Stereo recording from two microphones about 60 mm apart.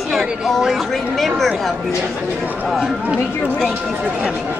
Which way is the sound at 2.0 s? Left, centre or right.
Right.